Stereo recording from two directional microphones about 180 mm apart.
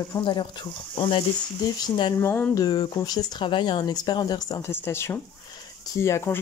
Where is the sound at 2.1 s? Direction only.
10° left (ahead or behind).